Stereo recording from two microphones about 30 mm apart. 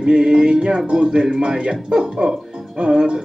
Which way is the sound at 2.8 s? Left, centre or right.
Right.